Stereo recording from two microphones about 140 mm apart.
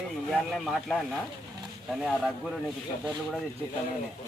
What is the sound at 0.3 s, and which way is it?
Speech, 5° left (ahead or behind).